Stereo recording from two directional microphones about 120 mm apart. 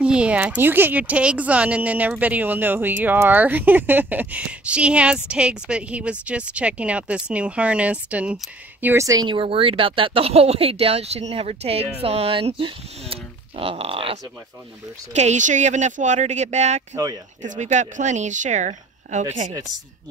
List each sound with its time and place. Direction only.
0.0 s speech: 10° right (ahead or behind)
8.8 s speech: 25° right (ahead or behind); by 14.1 s 50° right (ahead or behind)
15.1 s speech: 80° right
16.9 s speech: 35° right (ahead or behind)
17.4 s speech: 90° right